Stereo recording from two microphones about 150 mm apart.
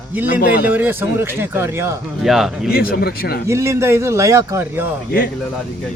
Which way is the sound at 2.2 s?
Centre (ahead or behind).